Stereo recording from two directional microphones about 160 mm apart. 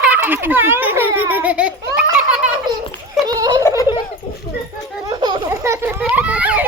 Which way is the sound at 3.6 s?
20° left (ahead or behind).